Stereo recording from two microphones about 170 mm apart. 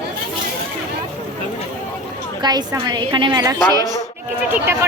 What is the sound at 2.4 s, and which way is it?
A woman's voice, 25° right (ahead or behind).